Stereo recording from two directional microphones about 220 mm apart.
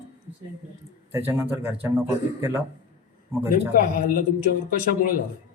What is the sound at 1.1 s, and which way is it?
A man's voice, 10° right (ahead or behind).